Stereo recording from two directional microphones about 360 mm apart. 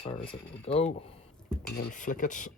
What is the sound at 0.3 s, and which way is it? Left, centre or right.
Speech, centre.